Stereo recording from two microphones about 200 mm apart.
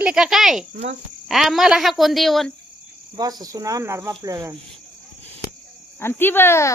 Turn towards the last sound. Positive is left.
turn(degrees=10)  # may be behind; listen again after turning